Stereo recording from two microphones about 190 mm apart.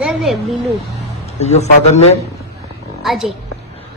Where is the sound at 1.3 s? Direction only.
35° left (ahead or behind).